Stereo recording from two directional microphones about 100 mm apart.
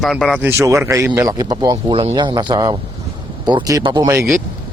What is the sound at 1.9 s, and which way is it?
Speech, 55° right (ahead or behind).